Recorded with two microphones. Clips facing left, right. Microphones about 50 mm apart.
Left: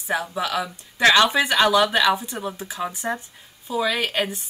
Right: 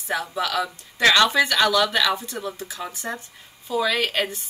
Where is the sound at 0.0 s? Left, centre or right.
Centre.